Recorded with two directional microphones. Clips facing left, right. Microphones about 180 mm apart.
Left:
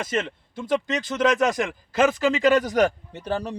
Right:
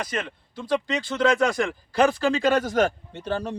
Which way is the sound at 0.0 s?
25° left (ahead or behind).